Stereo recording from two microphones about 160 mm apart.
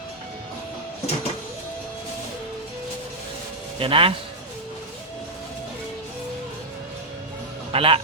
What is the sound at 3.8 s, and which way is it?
Speech, 35° right (ahead or behind).